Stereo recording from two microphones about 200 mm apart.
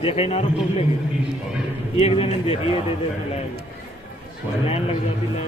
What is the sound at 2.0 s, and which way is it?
Speech, 30° left (ahead or behind).